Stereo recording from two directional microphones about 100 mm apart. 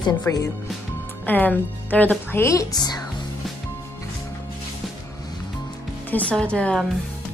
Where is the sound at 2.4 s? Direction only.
35° left (ahead or behind).